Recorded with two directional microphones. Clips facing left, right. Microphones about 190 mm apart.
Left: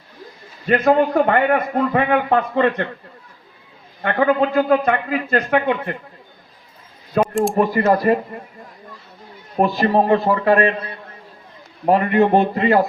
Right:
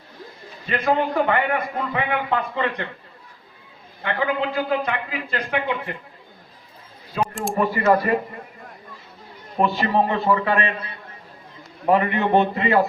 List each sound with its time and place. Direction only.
0.7 s a man's voice: 50° left (ahead or behind)
4.0 s a man's voice: 50° left (ahead or behind)
7.1 s a sound: 55° left (ahead or behind)
7.5 s a man's voice: 40° left (ahead or behind)
9.7 s a man's voice: 40° left (ahead or behind)
11.9 s a man's voice: 40° left (ahead or behind)